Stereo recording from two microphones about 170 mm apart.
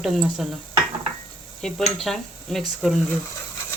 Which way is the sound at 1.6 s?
5° left (ahead or behind).